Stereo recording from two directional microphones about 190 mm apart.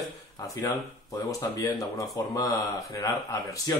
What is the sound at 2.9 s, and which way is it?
Speech, 15° left (ahead or behind).